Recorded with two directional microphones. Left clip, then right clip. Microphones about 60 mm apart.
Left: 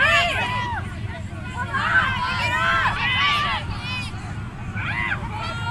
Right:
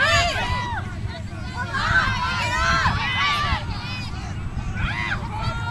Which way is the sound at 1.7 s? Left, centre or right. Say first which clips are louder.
Left 1 dB; right.